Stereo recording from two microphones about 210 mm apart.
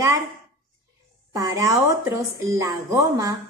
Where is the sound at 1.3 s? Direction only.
15° right (ahead or behind).